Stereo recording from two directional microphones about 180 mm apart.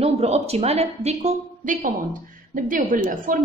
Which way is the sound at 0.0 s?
35° right (ahead or behind).